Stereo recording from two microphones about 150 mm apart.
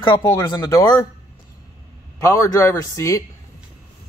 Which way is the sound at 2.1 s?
20° left (ahead or behind).